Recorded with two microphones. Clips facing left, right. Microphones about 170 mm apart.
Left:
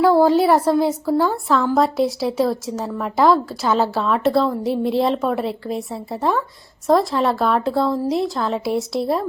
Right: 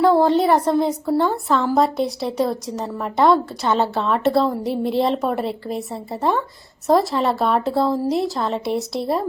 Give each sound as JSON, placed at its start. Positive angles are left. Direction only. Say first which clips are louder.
{"t": 0.0, "sound": "a woman's voice", "louder": "left 1 dB", "side_deg": 5}